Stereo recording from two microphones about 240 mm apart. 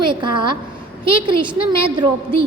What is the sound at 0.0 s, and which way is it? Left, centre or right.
A woman's voice, centre.